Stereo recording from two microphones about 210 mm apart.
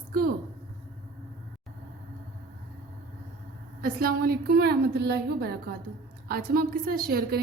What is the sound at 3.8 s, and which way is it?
A woman's voice, 45° right (ahead or behind).